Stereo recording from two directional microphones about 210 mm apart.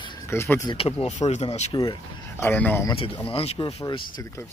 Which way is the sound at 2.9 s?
25° left (ahead or behind).